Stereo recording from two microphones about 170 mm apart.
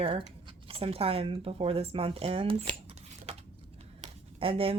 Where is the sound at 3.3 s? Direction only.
40° right (ahead or behind).